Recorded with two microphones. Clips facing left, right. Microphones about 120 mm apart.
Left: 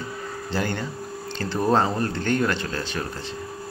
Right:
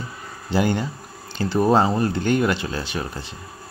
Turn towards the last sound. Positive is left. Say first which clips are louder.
# right 1 dB
turn(degrees=-15)  # may be behind; listen again after turning